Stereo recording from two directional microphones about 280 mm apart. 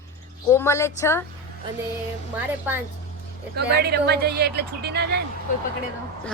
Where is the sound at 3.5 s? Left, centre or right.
Right.